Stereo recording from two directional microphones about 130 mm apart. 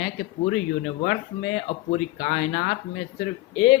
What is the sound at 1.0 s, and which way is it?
Speech, 60° left (ahead or behind).